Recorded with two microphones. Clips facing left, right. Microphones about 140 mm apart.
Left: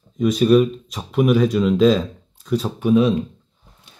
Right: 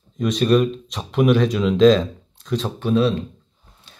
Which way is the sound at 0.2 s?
5° left (ahead or behind).